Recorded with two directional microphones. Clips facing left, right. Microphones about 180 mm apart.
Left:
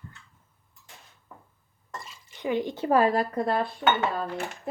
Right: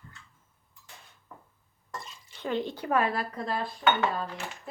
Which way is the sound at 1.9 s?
Centre (ahead or behind).